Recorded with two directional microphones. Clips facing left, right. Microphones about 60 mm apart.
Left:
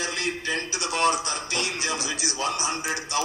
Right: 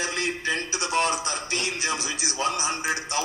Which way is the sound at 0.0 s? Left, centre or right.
Right.